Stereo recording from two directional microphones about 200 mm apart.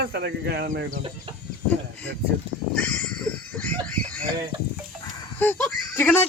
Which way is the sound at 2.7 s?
5° left (ahead or behind).